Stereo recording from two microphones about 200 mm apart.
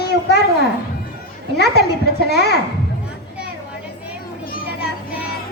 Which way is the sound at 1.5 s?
55° left (ahead or behind).